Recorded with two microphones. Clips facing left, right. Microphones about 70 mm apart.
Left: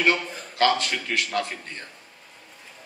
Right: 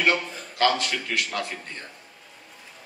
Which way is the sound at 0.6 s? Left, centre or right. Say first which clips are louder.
Left 1 dB; left.